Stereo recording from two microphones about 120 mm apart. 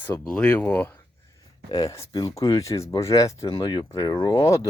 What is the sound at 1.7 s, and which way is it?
Speech, 30° left (ahead or behind).